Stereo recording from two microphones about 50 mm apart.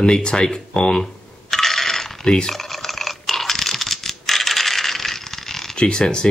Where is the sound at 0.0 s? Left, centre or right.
Centre.